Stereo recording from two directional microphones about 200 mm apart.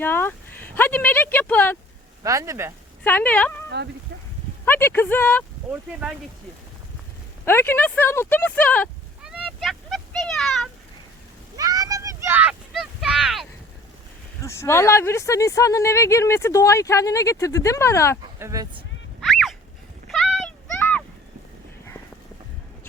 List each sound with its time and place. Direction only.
0.0 s speech: 10° left (ahead or behind)
2.2 s speech: 15° right (ahead or behind)
3.0 s speech: 10° left (ahead or behind)
4.6 s speech: 10° left (ahead or behind)
5.7 s speech: 5° right (ahead or behind)
7.4 s speech: 10° left (ahead or behind)
9.2 s a sound: centre (ahead or behind)
11.5 s a sound: 20° right (ahead or behind); by 13.5 s centre (ahead or behind)
14.4 s speech: 15° left (ahead or behind)
18.3 s speech: 15° right (ahead or behind)
19.2 s a sound: centre (ahead or behind)